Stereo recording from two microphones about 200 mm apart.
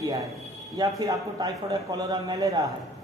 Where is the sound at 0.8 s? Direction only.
15° right (ahead or behind).